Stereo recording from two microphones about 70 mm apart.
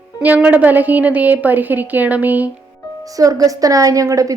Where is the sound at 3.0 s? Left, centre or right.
Right.